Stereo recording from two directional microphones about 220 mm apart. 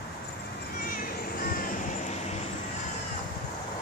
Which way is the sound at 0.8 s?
40° left (ahead or behind).